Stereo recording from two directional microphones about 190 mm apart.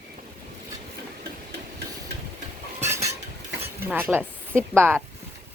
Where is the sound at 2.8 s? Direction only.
15° right (ahead or behind).